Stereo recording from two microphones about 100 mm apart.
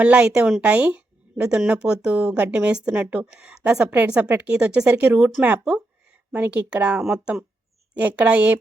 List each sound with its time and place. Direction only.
0.0 s speech: 10° right (ahead or behind)
6.3 s speech: 15° right (ahead or behind)